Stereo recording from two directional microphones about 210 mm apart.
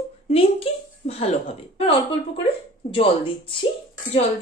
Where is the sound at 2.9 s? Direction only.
25° left (ahead or behind).